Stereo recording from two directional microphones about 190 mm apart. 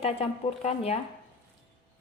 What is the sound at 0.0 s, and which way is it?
Speech, 35° left (ahead or behind).